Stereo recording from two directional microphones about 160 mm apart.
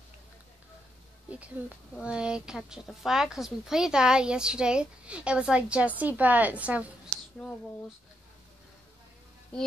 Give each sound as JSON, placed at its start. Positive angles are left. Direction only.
{"t": 1.3, "sound": "speech", "side_deg": -10}